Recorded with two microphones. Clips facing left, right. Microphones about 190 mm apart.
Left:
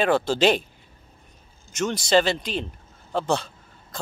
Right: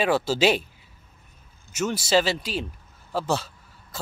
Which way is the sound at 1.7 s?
5° right (ahead or behind).